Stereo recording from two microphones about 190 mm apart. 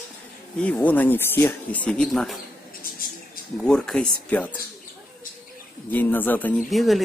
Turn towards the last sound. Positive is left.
turn(degrees=0)  # may be behind; listen again after turning